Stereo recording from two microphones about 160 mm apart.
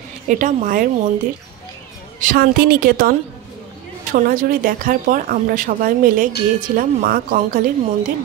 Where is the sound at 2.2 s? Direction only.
65° right (ahead or behind).